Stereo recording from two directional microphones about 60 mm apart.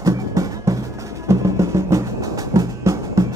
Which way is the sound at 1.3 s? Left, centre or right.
Right.